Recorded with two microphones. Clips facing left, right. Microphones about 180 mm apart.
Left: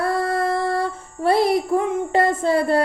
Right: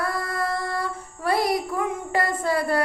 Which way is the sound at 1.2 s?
25° left (ahead or behind).